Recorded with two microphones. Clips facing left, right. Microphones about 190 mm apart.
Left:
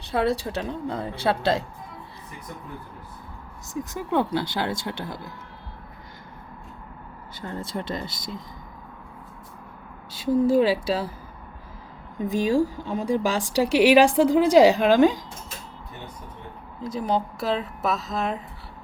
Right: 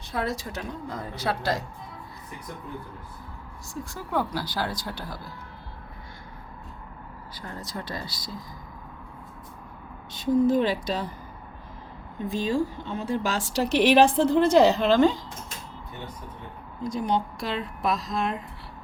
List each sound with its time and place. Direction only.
0.1 s a woman's voice: 30° left (ahead or behind)
3.8 s a woman's voice: 20° left (ahead or behind)
7.4 s a woman's voice: 25° left (ahead or behind)
10.2 s speech: 10° left (ahead or behind)
12.3 s speech: 15° left (ahead or behind)
16.8 s speech: 5° left (ahead or behind)